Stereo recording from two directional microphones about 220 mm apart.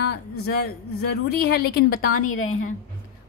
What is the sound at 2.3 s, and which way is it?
Speech, 70° left (ahead or behind).